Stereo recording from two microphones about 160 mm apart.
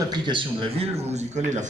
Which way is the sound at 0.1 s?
30° right (ahead or behind).